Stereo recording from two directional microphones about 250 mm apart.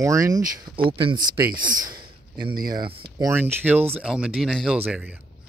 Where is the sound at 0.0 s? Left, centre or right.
Centre.